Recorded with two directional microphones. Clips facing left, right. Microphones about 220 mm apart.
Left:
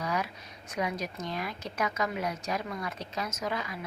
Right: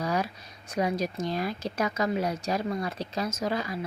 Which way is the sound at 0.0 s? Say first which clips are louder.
Right 4 dB; 35° right (ahead or behind).